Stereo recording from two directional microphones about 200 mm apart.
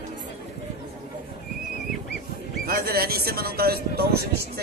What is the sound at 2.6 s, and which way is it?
Speech, 50° right (ahead or behind).